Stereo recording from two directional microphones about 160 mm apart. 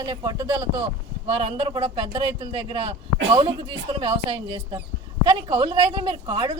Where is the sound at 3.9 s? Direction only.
30° right (ahead or behind).